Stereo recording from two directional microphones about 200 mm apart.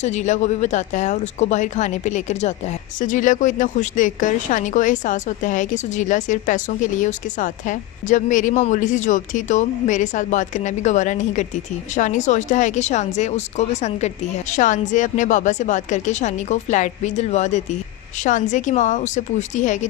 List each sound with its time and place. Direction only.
0.0 s speech: 35° left (ahead or behind)